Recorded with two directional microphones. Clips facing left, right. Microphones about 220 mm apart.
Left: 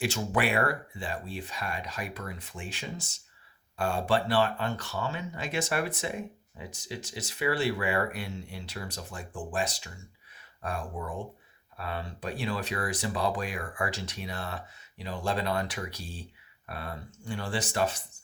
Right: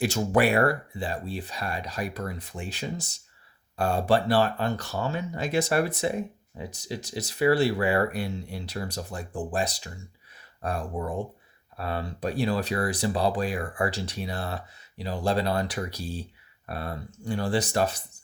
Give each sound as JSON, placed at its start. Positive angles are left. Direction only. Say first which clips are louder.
{"t": 0.0, "sound": "speech", "louder": "right 6 dB", "side_deg": -40}